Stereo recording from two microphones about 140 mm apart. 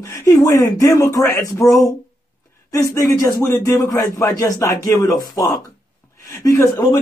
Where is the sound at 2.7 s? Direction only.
20° left (ahead or behind).